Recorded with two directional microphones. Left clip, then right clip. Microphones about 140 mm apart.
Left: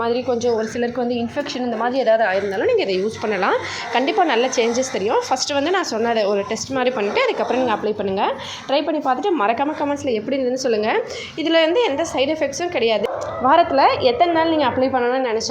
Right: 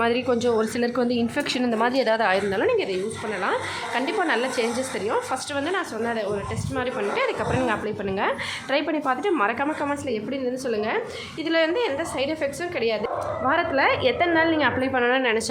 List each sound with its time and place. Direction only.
0.0 s a woman's voice: 10° right (ahead or behind)
2.7 s a woman's voice: 30° left (ahead or behind)
3.2 s speech: 45° left (ahead or behind)
3.9 s a woman's voice: 30° left (ahead or behind)
5.6 s a woman's voice: 40° left (ahead or behind); by 10.2 s 15° left (ahead or behind)
10.3 s a woman's voice: 30° left (ahead or behind)
13.8 s a woman's voice: 15° left (ahead or behind)
14.9 s a woman's voice: centre (ahead or behind)